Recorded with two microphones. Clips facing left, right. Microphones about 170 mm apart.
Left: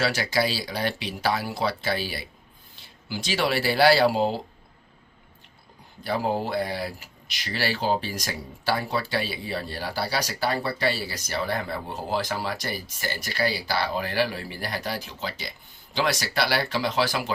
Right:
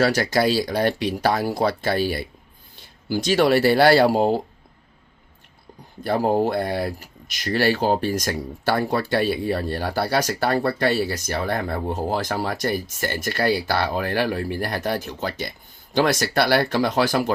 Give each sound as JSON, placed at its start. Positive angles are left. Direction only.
{"t": 0.0, "sound": "speech", "side_deg": -45}
{"t": 6.0, "sound": "speech", "side_deg": -50}